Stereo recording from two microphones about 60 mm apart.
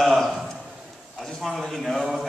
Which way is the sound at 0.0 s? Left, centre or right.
Centre.